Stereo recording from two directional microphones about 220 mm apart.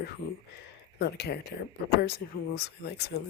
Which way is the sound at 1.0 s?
50° left (ahead or behind).